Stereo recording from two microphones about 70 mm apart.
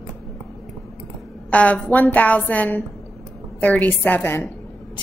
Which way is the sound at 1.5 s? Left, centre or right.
Centre.